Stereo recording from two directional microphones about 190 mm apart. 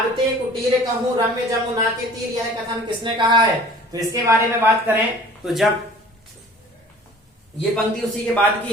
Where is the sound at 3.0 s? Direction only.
25° right (ahead or behind).